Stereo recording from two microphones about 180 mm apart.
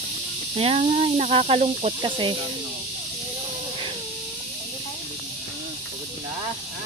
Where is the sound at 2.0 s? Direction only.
25° right (ahead or behind).